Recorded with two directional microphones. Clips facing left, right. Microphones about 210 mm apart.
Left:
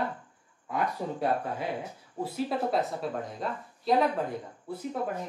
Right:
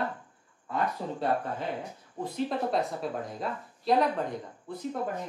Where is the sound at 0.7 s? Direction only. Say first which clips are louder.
Even; 10° left (ahead or behind).